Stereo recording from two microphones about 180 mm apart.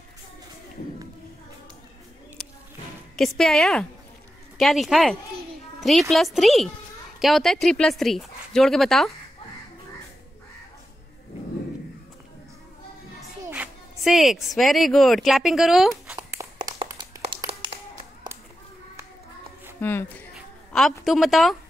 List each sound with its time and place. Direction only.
2.4 s a sound: centre (ahead or behind)
3.2 s speech: centre (ahead or behind)
13.2 s a child's voice: 5° right (ahead or behind)
16.2 s a sound: 20° right (ahead or behind)
19.8 s speech: 10° left (ahead or behind)
21.0 s speech: centre (ahead or behind)